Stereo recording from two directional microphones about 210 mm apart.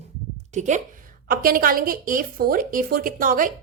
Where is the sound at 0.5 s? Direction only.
35° right (ahead or behind).